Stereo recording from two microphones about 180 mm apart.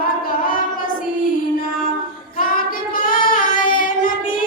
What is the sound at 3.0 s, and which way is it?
Child singing, 50° left (ahead or behind).